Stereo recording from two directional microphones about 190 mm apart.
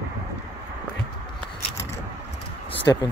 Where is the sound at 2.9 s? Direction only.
20° left (ahead or behind).